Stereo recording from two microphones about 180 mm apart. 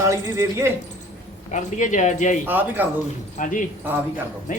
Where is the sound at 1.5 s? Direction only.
40° left (ahead or behind).